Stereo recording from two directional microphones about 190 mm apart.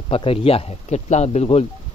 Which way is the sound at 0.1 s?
30° left (ahead or behind).